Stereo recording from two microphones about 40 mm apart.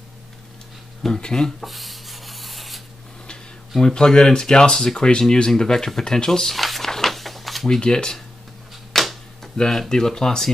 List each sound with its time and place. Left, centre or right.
1.0 s speech: centre
1.6 s rub: centre
3.7 s speech: centre
6.5 s a sound: centre
7.6 s speech: centre
8.9 s a sound: centre
9.7 s speech: centre